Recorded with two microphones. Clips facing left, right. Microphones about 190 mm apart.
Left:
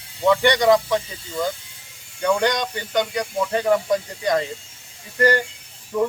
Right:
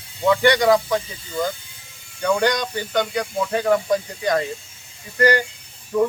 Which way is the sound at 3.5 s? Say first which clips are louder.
Right 1 dB; centre (ahead or behind).